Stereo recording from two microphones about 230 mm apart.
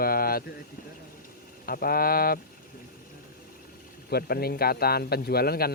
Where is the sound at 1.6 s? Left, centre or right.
Left.